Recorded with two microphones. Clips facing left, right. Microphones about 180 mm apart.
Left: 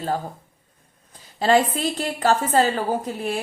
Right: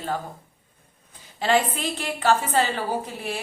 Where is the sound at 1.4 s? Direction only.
40° left (ahead or behind).